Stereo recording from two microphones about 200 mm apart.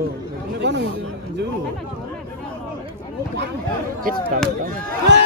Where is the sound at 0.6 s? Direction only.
60° right (ahead or behind).